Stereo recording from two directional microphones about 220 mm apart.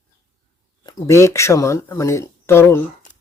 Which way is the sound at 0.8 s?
15° left (ahead or behind).